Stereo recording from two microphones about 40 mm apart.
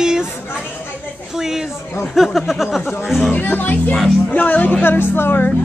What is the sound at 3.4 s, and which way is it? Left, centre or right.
Speech, left.